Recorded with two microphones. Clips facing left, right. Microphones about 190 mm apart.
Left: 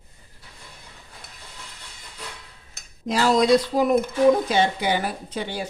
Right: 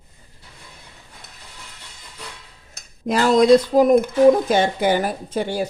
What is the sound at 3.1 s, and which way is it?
Speech, 50° right (ahead or behind).